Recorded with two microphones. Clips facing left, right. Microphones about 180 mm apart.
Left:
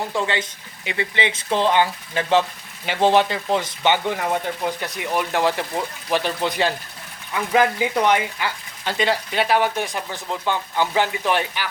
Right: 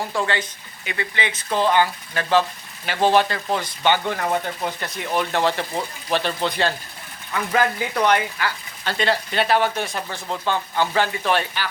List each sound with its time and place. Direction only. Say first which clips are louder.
0.1 s speech: even; 20° left (ahead or behind)
4.3 s speech: left 1 dB; 5° left (ahead or behind)